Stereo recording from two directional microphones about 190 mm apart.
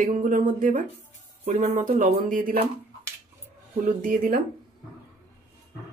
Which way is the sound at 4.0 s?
45° right (ahead or behind).